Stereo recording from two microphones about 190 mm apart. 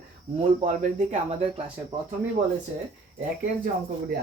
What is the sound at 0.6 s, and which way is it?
Speech, 40° right (ahead or behind).